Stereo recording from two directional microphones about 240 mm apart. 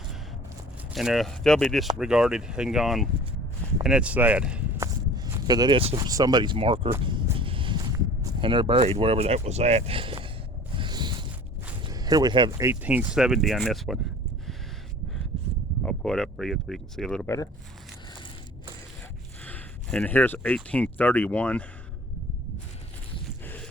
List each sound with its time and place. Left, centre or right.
0.9 s speech: centre; by 6.9 s right
7.0 s a sound: centre
8.2 s speech: centre
10.8 s zipper: centre
11.8 s speech: centre
15.8 s speech: centre
19.5 s speech: centre